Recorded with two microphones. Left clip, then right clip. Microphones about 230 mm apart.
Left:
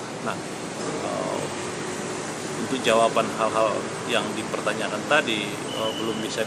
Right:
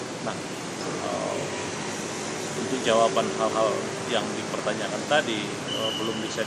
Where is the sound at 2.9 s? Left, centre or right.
Centre.